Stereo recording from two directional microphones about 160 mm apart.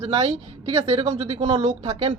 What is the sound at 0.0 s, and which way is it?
Speech, 45° right (ahead or behind).